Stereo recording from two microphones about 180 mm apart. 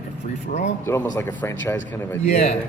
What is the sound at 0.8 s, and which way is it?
Speech, 15° left (ahead or behind).